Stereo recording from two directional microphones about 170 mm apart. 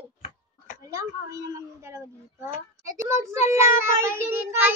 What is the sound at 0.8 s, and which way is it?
Speech, 20° right (ahead or behind).